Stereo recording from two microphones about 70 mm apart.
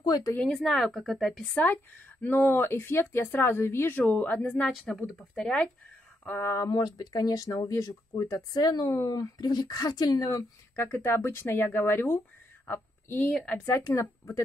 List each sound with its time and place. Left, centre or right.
0.0 s speech: left
0.5 s a woman's voice: centre
1.5 s speech: left
3.9 s speech: left
4.9 s speech: centre
6.2 s speech: left
6.7 s speech: left
8.5 s speech: left
10.8 s a woman's voice: left
13.7 s speech: left